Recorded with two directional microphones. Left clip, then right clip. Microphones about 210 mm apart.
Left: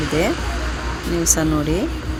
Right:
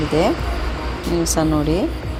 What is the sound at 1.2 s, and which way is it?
Speech, 5° left (ahead or behind).